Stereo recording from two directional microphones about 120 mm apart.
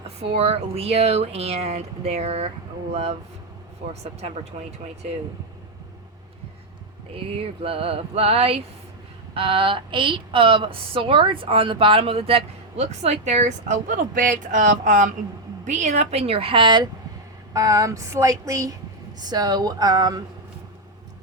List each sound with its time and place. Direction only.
0.3 s speech: 55° right (ahead or behind)
3.8 s speech: 75° right (ahead or behind)
4.2 s speech: 65° right (ahead or behind)
7.3 s speech: 50° right (ahead or behind); by 15.1 s 90° right
15.6 s speech: 75° right (ahead or behind); by 16.8 s 45° right (ahead or behind)
17.5 s speech: 30° right (ahead or behind)